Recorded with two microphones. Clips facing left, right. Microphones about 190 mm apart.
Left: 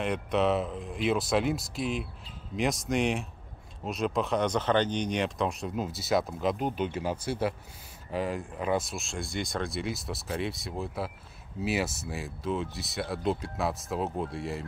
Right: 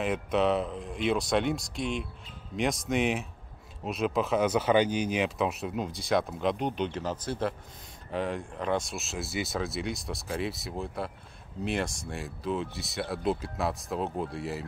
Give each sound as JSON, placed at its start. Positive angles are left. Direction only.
{"t": 0.0, "sound": "speech", "side_deg": 0}